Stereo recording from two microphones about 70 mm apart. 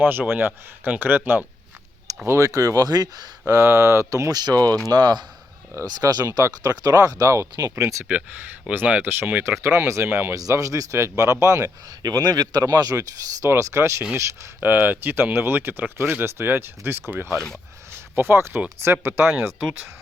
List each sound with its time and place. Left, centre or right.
0.0 s speech: right
2.2 s speech: right
2.5 s speech: right
3.4 s speech: right
4.3 s speech: right
6.2 s speech: right
8.7 s speech: right
10.5 s speech: right
13.0 s speech: right
14.6 s speech: right
17.2 s speech: centre
18.2 s speech: right